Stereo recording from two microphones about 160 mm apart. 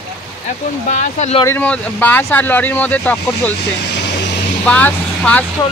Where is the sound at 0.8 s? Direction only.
50° left (ahead or behind).